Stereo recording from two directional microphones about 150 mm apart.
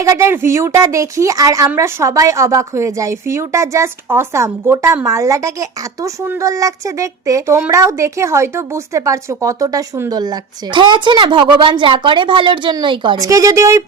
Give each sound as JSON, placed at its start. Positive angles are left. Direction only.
{"t": 0.0, "sound": "a woman's voice", "side_deg": -20}